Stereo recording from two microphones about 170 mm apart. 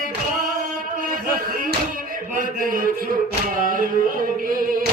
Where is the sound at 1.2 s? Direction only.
55° right (ahead or behind).